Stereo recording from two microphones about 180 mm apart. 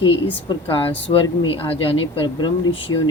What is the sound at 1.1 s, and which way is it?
Speech, 25° left (ahead or behind).